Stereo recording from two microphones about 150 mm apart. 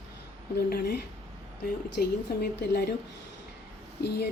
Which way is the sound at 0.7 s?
90° left.